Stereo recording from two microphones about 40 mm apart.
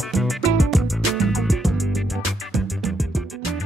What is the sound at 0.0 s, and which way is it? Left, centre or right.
Music, centre.